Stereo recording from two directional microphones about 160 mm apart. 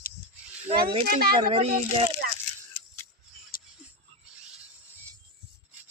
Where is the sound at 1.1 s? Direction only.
70° right (ahead or behind).